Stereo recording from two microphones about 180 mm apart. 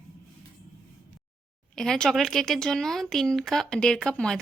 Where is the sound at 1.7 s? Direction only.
5° left (ahead or behind).